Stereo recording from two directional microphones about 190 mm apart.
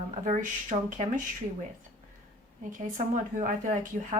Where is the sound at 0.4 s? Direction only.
40° right (ahead or behind).